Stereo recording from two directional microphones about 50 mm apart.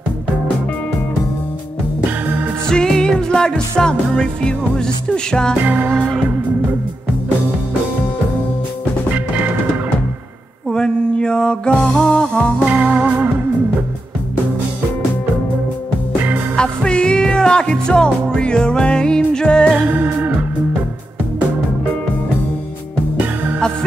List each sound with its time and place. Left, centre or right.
2.7 s music: centre
10.7 s music: centre
12.6 s music: right
16.5 s music: centre